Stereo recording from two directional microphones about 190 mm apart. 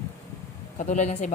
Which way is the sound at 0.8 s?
35° left (ahead or behind).